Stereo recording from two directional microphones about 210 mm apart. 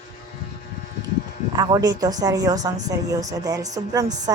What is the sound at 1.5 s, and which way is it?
A woman's voice, 20° right (ahead or behind).